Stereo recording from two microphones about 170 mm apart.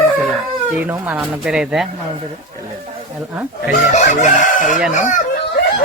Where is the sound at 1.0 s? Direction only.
10° right (ahead or behind).